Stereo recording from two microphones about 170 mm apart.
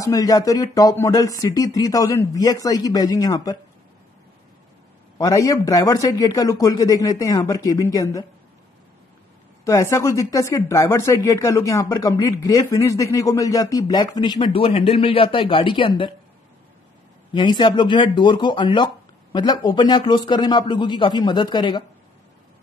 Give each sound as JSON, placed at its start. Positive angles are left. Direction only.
{"t": 0.0, "sound": "speech", "side_deg": 20}
{"t": 5.1, "sound": "speech", "side_deg": 20}
{"t": 9.7, "sound": "speech", "side_deg": 15}
{"t": 17.3, "sound": "speech", "side_deg": 25}